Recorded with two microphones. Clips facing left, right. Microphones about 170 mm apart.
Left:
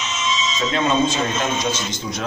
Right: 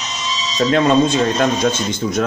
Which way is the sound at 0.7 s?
60° right (ahead or behind).